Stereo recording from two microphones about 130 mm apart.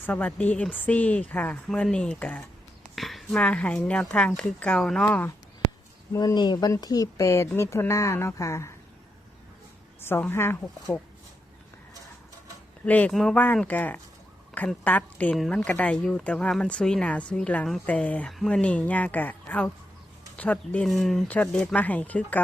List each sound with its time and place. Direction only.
0.0 s speech: 10° left (ahead or behind)
2.8 s a sound: centre (ahead or behind)
3.4 s speech: 10° left (ahead or behind)
6.1 s speech: 30° left (ahead or behind)
10.0 s speech: 15° left (ahead or behind)
12.8 s speech: 10° left (ahead or behind)